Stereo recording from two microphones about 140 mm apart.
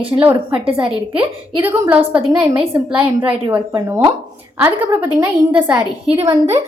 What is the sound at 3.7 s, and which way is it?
A woman's voice, 20° right (ahead or behind).